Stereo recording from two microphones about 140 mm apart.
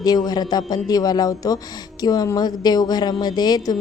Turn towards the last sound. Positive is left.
turn(degrees=30)  # may be behind; listen again after turning